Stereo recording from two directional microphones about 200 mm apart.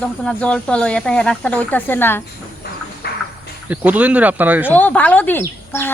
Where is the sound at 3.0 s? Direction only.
55° left (ahead or behind).